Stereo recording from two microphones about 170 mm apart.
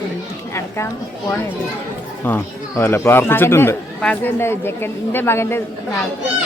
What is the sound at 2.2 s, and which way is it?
Speech, 10° left (ahead or behind).